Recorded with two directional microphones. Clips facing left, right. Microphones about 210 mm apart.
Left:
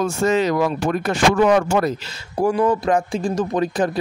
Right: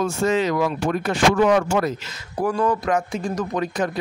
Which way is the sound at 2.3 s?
25° left (ahead or behind).